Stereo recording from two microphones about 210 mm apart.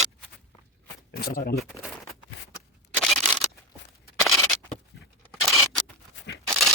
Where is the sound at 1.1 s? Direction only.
45° left (ahead or behind).